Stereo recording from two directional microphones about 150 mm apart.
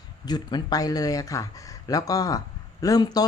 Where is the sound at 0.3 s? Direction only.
30° left (ahead or behind).